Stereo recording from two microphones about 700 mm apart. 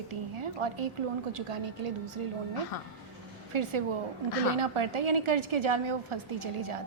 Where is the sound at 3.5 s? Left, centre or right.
Right.